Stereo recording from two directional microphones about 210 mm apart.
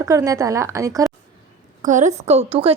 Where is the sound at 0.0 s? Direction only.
15° right (ahead or behind).